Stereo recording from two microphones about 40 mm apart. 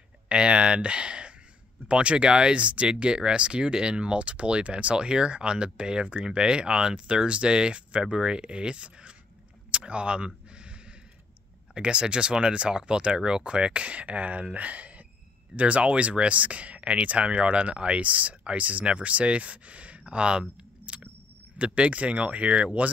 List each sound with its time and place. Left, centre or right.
0.3 s speech: right
9.7 s a sound: right
11.7 s speech: right